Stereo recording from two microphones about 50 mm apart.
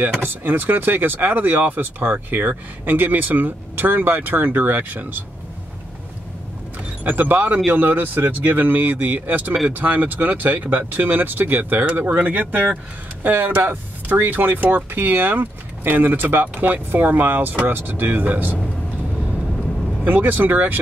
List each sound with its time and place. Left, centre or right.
0.2 s speech: right
7.1 s speech: right
20.1 s speech: right